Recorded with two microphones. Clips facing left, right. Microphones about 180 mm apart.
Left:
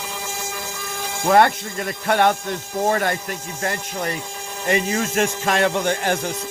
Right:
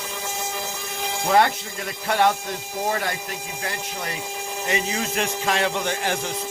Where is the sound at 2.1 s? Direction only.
55° left (ahead or behind).